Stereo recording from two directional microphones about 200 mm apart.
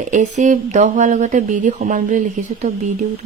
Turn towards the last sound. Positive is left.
turn(degrees=-40)  # may be behind; listen again after turning